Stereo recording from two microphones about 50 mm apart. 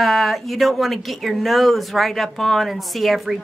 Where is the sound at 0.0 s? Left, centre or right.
Centre.